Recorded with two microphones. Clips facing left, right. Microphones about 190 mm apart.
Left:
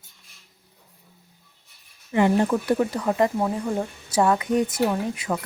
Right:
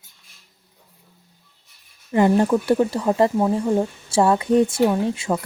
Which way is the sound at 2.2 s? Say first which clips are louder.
Right 3 dB; 35° right (ahead or behind).